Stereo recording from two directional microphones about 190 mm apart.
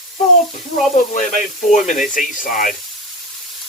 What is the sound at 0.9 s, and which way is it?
Speech, 40° left (ahead or behind).